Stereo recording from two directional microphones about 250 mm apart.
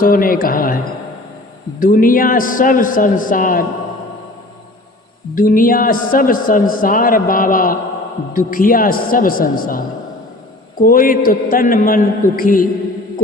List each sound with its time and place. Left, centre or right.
0.0 s a man's voice: left
1.8 s a man's voice: left
5.3 s a man's voice: left